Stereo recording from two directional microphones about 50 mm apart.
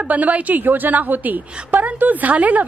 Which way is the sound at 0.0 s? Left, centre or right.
Right.